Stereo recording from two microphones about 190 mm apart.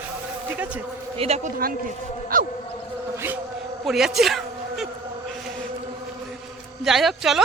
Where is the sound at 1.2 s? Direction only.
35° right (ahead or behind).